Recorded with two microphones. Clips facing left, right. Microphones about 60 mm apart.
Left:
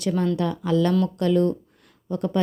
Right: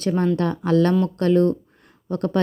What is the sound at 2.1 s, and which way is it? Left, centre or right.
Speech, right.